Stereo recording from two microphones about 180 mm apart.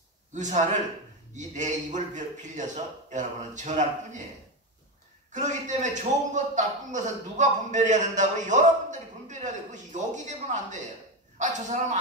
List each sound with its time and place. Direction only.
0.3 s a man's voice: 40° right (ahead or behind)
5.3 s a man's voice: 40° right (ahead or behind)